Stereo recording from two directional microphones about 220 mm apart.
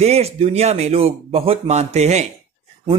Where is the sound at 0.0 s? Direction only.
30° right (ahead or behind).